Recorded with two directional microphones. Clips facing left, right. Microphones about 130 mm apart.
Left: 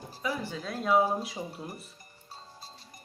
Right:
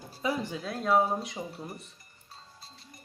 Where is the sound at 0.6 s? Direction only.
Centre (ahead or behind).